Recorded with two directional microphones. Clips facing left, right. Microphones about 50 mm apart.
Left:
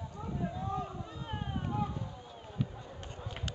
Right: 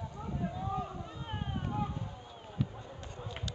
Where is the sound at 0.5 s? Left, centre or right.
Centre.